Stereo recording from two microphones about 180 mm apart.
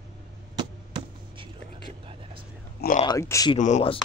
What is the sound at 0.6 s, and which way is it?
Basketball bounce, 25° right (ahead or behind).